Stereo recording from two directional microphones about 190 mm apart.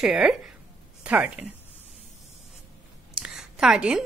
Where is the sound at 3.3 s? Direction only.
5° right (ahead or behind).